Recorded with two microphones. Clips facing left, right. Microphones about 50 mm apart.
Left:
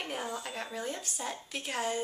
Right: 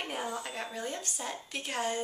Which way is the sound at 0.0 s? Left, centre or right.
Centre.